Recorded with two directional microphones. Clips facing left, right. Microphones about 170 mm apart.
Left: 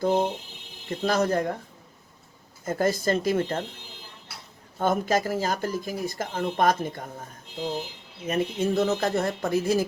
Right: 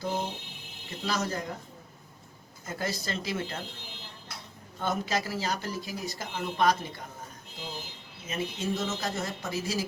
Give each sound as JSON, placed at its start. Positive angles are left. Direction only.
{"t": 0.0, "sound": "speech", "side_deg": 55}
{"t": 2.6, "sound": "speech", "side_deg": 50}
{"t": 4.8, "sound": "speech", "side_deg": 50}
{"t": 8.3, "sound": "speech", "side_deg": 60}